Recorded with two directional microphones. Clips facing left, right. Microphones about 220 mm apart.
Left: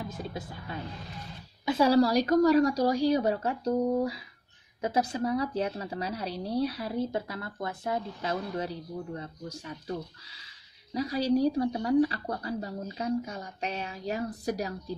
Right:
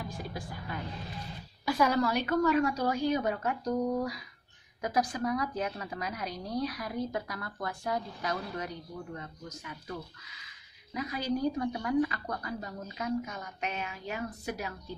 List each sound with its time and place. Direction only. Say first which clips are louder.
0.1 s a woman's voice: left 2 dB; 20° left (ahead or behind)